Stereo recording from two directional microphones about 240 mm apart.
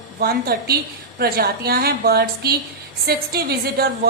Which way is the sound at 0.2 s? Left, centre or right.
Right.